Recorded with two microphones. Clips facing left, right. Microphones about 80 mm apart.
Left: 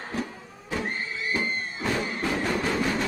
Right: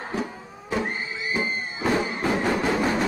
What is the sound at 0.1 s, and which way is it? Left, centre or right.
Music, centre.